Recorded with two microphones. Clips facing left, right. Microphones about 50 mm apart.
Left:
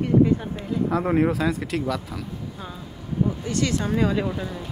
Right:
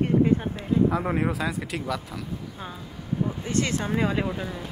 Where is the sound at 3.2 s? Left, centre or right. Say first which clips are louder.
Left 2 dB; right.